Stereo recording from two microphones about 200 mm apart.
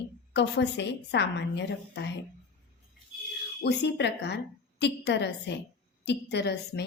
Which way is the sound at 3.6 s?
55° left (ahead or behind).